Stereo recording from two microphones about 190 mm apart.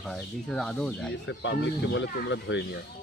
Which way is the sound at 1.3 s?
70° left (ahead or behind).